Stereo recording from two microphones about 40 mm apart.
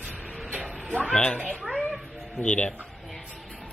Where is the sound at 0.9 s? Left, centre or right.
Left.